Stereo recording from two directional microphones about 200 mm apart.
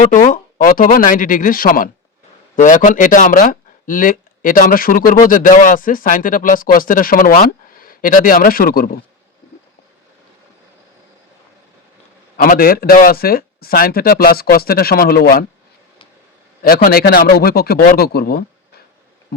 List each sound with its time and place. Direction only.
0.3 s speech: 45° left (ahead or behind)
12.4 s speech: 45° left (ahead or behind)
16.6 s speech: 50° left (ahead or behind)